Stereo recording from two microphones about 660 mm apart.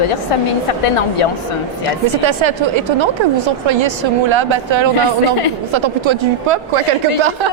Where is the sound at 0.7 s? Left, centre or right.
Left.